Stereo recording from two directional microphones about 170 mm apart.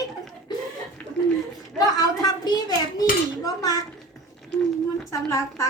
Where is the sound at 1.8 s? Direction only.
20° left (ahead or behind).